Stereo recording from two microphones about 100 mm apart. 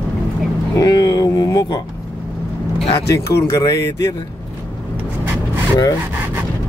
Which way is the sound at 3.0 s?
30° left (ahead or behind).